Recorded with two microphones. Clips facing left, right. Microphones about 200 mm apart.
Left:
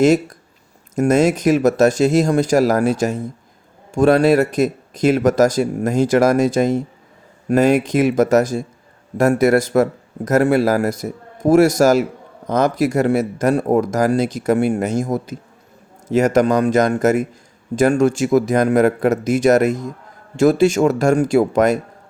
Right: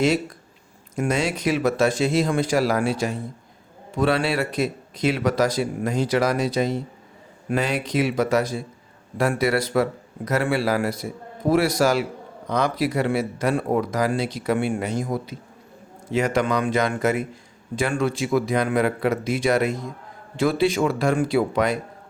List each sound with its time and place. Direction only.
0.0 s speech: 45° left (ahead or behind)